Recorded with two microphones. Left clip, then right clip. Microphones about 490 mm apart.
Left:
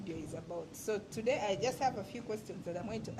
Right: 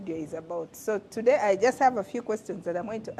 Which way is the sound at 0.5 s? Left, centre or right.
Right.